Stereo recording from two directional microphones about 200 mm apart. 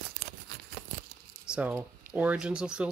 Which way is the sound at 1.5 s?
5° right (ahead or behind).